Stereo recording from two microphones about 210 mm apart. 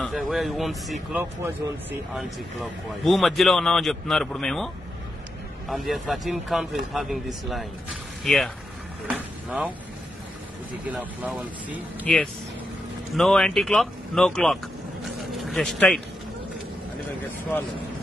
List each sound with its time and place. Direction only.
0.0 s speech: centre (ahead or behind)
5.7 s speech: centre (ahead or behind)
9.0 s a sound: 5° right (ahead or behind)
10.7 s speech: 5° right (ahead or behind)
12.0 s speech: 5° left (ahead or behind)
17.5 s speech: 10° left (ahead or behind)